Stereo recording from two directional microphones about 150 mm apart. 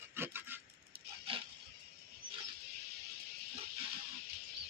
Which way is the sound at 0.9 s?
90° right.